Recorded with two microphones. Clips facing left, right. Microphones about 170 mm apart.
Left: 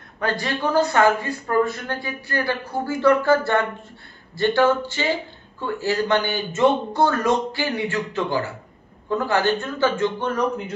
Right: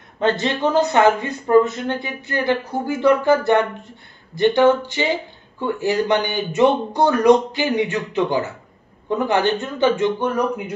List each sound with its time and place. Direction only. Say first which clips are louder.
0.2 s speech: right 5 dB; 25° right (ahead or behind)